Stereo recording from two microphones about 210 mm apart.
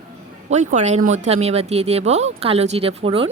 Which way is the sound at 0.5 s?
35° right (ahead or behind).